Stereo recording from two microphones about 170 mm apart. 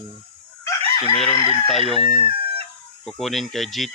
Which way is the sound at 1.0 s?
35° left (ahead or behind).